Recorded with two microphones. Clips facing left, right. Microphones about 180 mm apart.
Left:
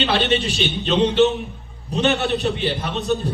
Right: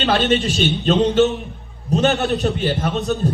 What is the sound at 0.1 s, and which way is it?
A man's voice, 45° right (ahead or behind).